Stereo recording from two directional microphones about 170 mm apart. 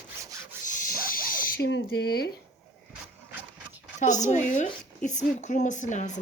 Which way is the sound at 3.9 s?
45° left (ahead or behind).